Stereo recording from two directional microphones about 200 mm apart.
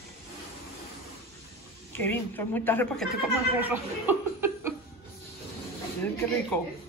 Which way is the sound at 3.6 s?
10° right (ahead or behind).